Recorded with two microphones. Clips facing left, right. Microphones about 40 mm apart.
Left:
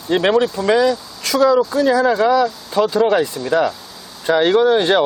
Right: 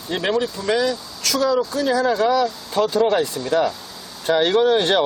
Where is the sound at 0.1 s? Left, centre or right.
Left.